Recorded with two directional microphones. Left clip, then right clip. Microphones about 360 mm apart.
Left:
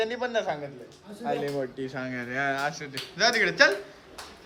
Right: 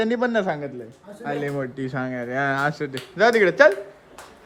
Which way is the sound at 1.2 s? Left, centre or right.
Right.